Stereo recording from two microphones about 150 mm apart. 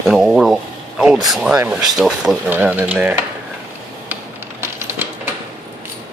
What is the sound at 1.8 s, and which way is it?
Speech, centre (ahead or behind).